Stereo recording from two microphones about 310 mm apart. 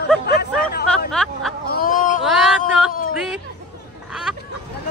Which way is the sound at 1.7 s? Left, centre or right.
Left.